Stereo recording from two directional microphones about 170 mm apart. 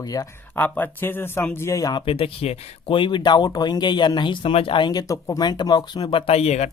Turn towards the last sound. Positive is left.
turn(degrees=40)  # may be behind; listen again after turning